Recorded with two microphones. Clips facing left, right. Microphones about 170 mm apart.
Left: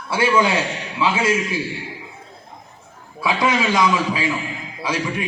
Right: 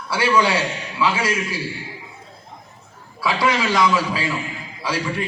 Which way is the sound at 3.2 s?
20° left (ahead or behind).